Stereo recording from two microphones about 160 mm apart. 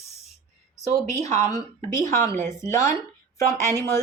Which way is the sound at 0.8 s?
45° right (ahead or behind).